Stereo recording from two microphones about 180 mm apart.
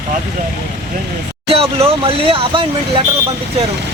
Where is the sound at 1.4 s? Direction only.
30° right (ahead or behind).